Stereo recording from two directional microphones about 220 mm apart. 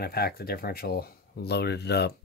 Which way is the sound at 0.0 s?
45° left (ahead or behind).